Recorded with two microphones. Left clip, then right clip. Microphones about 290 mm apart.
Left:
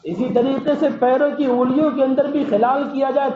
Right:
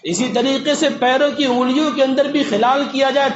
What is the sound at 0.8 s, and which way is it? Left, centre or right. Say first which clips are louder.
A man's voice: right 1 dB; right.